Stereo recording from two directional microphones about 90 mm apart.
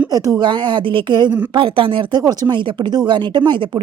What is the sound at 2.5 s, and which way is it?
Speech, 60° right (ahead or behind).